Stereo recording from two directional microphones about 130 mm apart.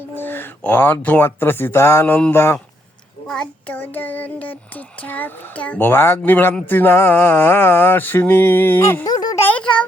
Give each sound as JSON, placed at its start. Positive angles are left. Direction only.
{"t": 0.1, "sound": "child singing", "side_deg": 15}
{"t": 3.2, "sound": "child singing", "side_deg": 5}
{"t": 9.5, "sound": "a child's voice", "side_deg": 10}